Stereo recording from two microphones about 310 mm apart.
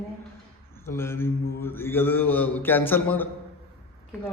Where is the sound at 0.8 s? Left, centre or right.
Centre.